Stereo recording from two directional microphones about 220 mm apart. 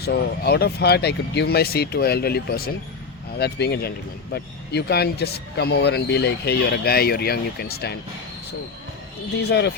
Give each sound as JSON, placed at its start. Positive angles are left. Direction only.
{"t": 0.0, "sound": "a man's voice", "side_deg": 45}
{"t": 9.4, "sound": "a man's voice", "side_deg": 50}